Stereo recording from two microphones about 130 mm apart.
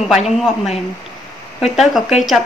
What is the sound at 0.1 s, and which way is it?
A woman's voice, centre (ahead or behind).